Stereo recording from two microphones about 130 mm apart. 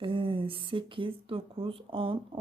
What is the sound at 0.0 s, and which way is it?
Speech, 40° right (ahead or behind).